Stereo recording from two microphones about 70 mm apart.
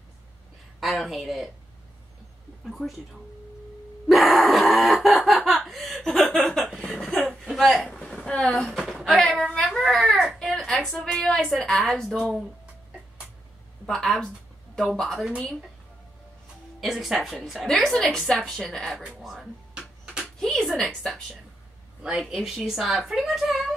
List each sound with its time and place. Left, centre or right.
0.7 s a woman's voice: centre
2.6 s a woman's voice: centre
4.1 s a sound: centre
6.6 s chuckle: centre
7.2 s a sound: centre
8.5 s a woman's voice: centre
9.0 s a woman's voice: centre
10.4 s a sound: centre
11.1 s a woman's voice: centre
13.8 s a woman's voice: centre
16.8 s a woman's voice: centre
17.9 s a woman's voice: centre
20.3 s a sound: centre
22.2 s a woman's voice: centre